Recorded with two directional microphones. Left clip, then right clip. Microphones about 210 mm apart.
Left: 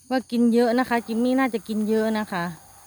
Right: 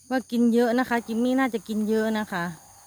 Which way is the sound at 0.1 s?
Centre (ahead or behind).